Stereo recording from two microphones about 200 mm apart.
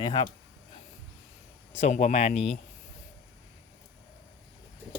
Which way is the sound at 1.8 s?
35° left (ahead or behind).